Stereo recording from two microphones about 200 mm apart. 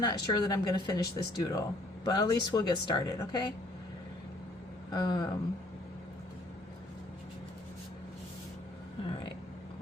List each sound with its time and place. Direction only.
0.0 s speech: 20° left (ahead or behind)
4.9 s speech: 20° left (ahead or behind)